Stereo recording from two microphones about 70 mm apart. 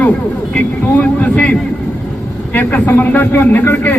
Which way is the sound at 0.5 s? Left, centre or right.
Centre.